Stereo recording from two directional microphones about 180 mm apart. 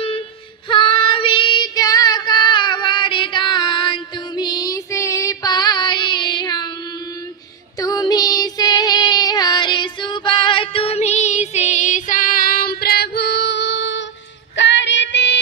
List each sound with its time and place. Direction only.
0.7 s child singing: 30° left (ahead or behind)
7.8 s female singing: 20° left (ahead or behind); by 15.3 s 85° left